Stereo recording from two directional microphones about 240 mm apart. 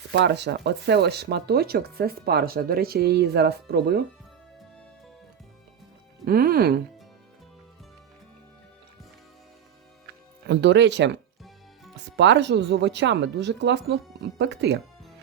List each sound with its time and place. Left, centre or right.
0.1 s speech: right
6.2 s speech: right
10.4 s speech: right